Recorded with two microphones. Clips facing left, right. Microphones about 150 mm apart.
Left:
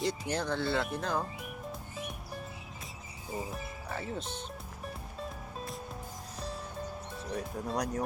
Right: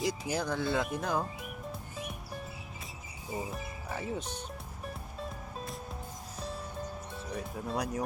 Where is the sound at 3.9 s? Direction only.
15° right (ahead or behind).